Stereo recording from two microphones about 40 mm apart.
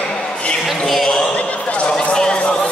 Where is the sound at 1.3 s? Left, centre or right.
Left.